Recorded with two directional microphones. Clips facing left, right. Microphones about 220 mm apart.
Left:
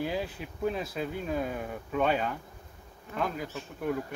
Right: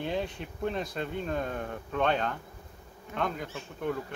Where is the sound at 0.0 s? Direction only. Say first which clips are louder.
Even; 5° left (ahead or behind).